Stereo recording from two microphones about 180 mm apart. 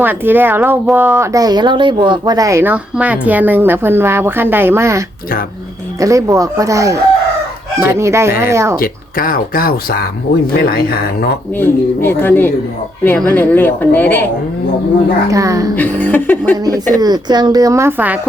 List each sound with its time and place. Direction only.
0.0 s speech: 10° right (ahead or behind)
8.8 s speech: 55° left (ahead or behind)
11.6 s a woman's voice: 10° left (ahead or behind)
15.3 s speech: 20° right (ahead or behind)
15.7 s a woman's voice: 10° left (ahead or behind)
16.9 s speech: 20° right (ahead or behind)